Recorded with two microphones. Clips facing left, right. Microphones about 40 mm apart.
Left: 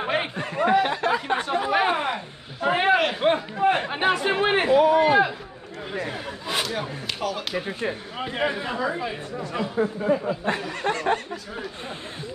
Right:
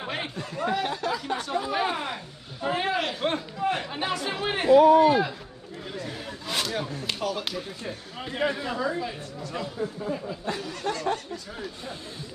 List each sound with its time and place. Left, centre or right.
0.0 s a sound: left
3.5 s chatter: left
4.7 s a sound: left
6.4 s speech: centre
7.5 s speech: left
8.2 s speech: left
9.8 s speech: left